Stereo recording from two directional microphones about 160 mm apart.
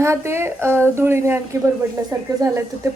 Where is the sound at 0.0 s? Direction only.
15° right (ahead or behind).